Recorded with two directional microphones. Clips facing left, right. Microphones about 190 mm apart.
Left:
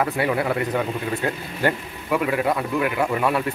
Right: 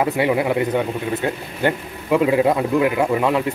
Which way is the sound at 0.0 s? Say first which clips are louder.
Right 4 dB; 20° right (ahead or behind).